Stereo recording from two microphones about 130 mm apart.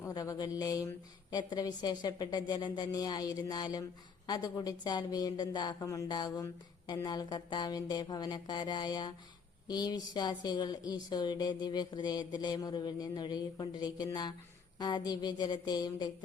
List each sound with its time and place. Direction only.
0.0 s speech: 25° left (ahead or behind)